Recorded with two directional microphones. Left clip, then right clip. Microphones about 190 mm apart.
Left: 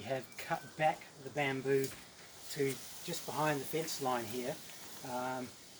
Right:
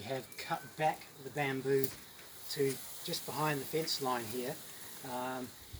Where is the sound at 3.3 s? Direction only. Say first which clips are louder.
Left 1 dB; 5° left (ahead or behind).